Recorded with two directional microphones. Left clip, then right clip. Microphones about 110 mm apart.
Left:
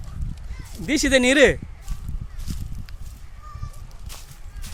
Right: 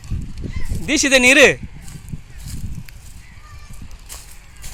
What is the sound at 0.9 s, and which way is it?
Speech, 25° left (ahead or behind).